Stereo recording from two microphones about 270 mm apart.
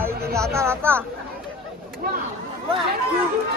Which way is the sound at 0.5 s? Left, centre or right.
Centre.